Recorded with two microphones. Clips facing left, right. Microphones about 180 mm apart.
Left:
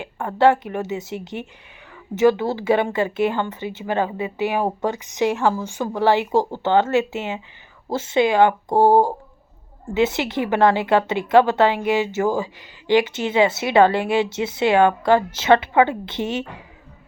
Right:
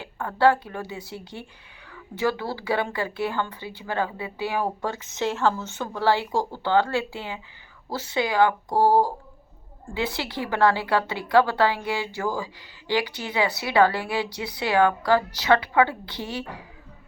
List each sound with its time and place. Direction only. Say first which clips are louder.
0.0 s a woman's voice: left 4 dB; 20° left (ahead or behind)